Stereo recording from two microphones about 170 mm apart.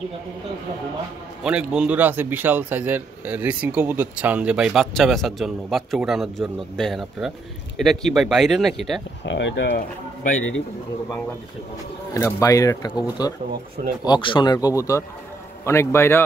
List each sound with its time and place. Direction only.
1.4 s speech: 5° right (ahead or behind)
9.2 s speech: 90° left
12.1 s a man's voice: 20° left (ahead or behind)